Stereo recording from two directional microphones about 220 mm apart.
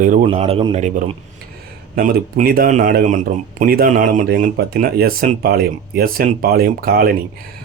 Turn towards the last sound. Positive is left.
turn(degrees=-45)  # may be behind; listen again after turning